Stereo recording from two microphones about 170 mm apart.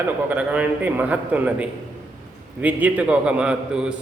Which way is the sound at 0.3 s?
10° right (ahead or behind).